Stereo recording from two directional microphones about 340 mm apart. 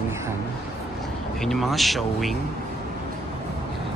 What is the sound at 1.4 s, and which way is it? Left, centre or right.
Speech, centre.